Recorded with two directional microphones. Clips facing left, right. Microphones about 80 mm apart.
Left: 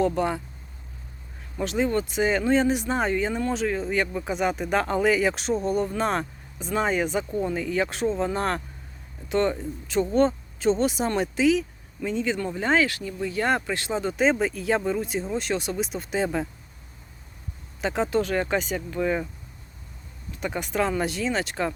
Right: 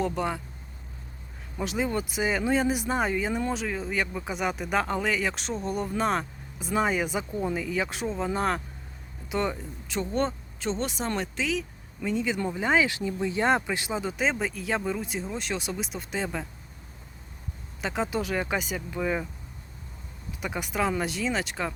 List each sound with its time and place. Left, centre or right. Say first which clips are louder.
0.0 s speech: left 5 dB; centre
1.5 s speech: left 4 dB; centre
12.0 s speech: left 1 dB; centre
17.7 s speech: left 5 dB; centre
20.4 s speech: left 3 dB; centre